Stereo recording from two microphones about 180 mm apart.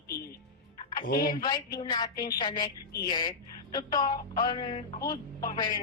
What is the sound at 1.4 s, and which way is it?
A woman's voice, 25° left (ahead or behind).